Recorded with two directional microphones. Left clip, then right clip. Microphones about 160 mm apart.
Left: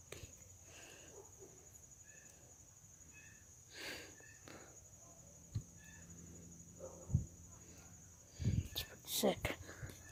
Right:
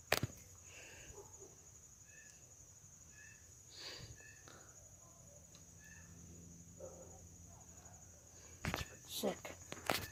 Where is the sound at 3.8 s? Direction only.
55° left (ahead or behind).